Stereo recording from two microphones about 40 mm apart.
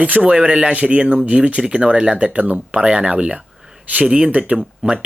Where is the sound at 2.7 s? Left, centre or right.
Right.